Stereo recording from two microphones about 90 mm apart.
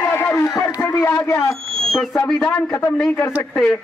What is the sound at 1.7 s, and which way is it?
Owl, 5° left (ahead or behind).